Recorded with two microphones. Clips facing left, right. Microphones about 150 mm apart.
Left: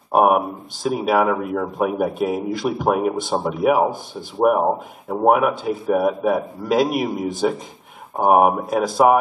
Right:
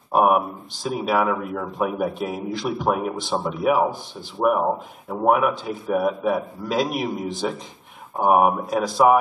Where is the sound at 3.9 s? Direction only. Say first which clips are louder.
Left 4 dB; 50° left (ahead or behind).